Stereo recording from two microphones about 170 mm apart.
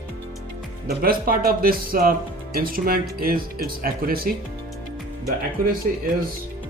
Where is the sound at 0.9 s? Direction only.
60° right (ahead or behind).